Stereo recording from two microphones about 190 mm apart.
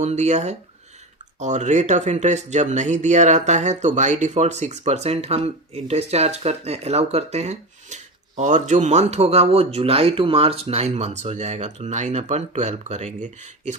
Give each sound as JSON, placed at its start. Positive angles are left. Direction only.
{"t": 0.0, "sound": "speech", "side_deg": -35}